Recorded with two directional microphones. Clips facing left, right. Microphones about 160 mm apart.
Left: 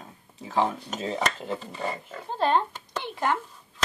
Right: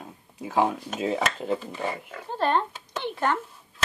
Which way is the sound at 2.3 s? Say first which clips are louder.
Left 1 dB; 15° left (ahead or behind).